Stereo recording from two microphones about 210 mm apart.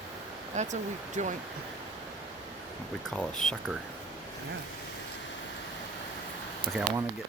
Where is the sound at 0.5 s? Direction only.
35° right (ahead or behind).